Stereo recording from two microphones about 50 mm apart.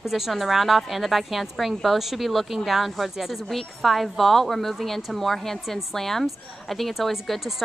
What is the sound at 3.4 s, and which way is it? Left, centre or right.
Speech, centre.